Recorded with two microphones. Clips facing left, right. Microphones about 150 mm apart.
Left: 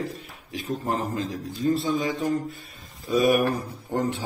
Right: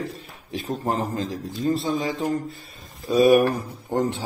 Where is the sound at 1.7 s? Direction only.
35° right (ahead or behind).